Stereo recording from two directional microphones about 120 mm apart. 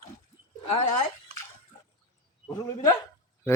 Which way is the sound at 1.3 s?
55° right (ahead or behind).